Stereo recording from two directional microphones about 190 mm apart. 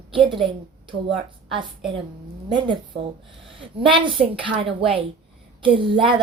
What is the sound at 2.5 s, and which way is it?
A woman's voice, 25° right (ahead or behind).